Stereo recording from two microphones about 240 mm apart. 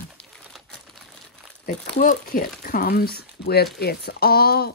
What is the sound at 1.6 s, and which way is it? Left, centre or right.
Speech, left.